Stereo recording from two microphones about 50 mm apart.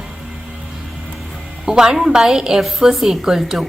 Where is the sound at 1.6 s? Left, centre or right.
Centre.